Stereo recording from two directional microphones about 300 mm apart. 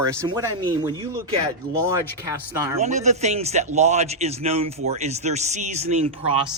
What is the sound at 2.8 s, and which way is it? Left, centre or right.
A man's voice, right.